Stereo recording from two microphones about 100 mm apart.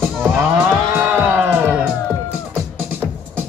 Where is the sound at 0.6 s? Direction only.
15° right (ahead or behind).